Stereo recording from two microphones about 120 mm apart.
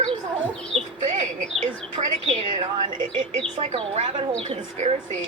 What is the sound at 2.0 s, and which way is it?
Speech, 50° right (ahead or behind).